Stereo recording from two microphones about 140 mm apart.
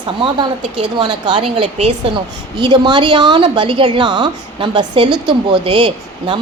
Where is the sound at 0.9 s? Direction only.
35° right (ahead or behind).